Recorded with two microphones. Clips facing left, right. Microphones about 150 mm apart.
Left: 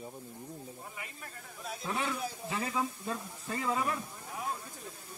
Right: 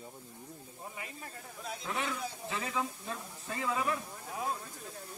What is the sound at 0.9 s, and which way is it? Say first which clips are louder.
Speech: right 1 dB; 25° right (ahead or behind).